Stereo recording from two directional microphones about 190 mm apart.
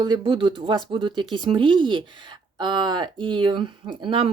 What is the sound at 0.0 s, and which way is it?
Speech, 25° right (ahead or behind).